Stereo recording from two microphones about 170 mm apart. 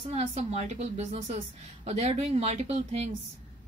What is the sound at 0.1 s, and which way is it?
Speech, 40° right (ahead or behind).